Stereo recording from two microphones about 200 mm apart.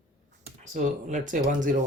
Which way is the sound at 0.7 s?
40° right (ahead or behind).